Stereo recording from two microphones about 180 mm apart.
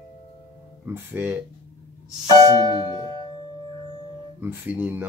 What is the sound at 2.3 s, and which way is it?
Music, 25° right (ahead or behind).